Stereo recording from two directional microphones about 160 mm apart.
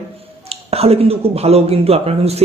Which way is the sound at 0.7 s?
40° right (ahead or behind).